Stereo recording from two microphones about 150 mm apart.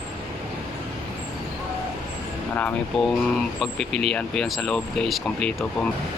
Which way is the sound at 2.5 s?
10° left (ahead or behind).